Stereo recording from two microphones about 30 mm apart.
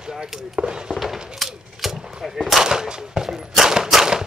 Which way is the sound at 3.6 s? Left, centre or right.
Right.